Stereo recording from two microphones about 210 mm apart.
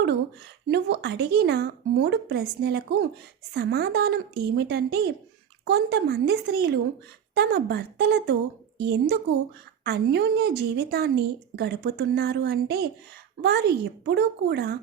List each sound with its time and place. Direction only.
0.7 s a woman's voice: 55° right (ahead or behind)